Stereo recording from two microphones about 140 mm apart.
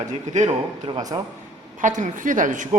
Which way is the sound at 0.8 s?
30° right (ahead or behind).